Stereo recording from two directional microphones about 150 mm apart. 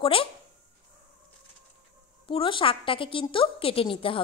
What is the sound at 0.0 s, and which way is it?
Speech, 35° left (ahead or behind).